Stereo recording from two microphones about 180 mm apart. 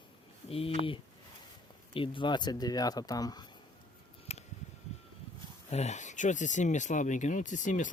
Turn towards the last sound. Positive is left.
turn(degrees=45)  # may be behind; listen again after turning